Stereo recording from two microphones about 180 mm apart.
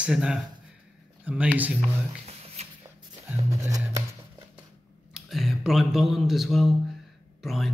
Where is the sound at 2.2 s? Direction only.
35° right (ahead or behind).